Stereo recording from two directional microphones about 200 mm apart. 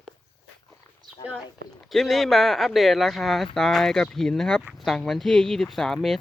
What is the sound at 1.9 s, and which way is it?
Speech, centre (ahead or behind).